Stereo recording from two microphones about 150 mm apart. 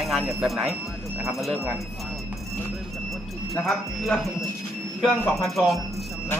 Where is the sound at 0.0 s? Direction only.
Centre (ahead or behind).